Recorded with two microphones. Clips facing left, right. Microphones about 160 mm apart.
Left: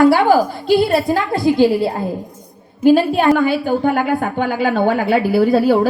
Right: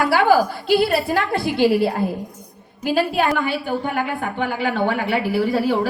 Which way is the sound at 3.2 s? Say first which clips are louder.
Left 6 dB; 40° left (ahead or behind).